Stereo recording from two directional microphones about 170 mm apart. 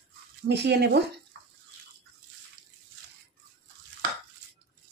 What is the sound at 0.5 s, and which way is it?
Speech, 85° right.